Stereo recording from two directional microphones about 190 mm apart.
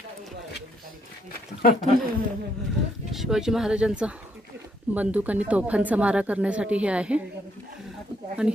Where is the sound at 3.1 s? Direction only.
Centre (ahead or behind).